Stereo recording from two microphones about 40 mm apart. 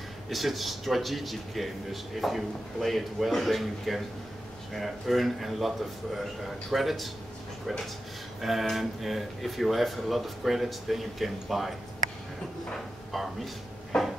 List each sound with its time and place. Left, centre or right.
0.3 s a man's voice: centre
8.4 s a man's voice: centre
13.1 s a man's voice: centre
13.9 s drawer open or close: centre